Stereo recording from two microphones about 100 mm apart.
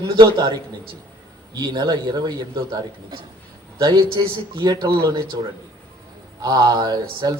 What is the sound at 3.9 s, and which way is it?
Speech, 50° right (ahead or behind).